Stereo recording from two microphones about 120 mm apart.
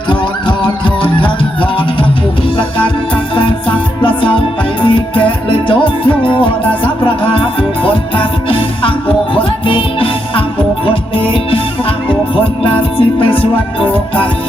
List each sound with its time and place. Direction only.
0.1 s music: 45° left (ahead or behind)